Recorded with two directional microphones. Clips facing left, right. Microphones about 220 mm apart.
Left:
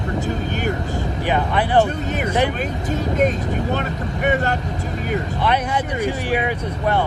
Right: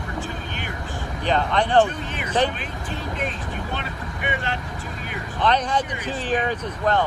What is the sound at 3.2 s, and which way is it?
Speech, 40° left (ahead or behind).